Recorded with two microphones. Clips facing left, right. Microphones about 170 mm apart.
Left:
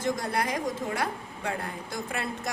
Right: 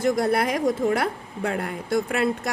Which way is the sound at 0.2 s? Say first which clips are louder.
Right 8 dB; 70° right (ahead or behind).